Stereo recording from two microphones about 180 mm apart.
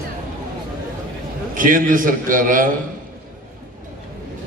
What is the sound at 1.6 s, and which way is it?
A man's voice, 50° right (ahead or behind).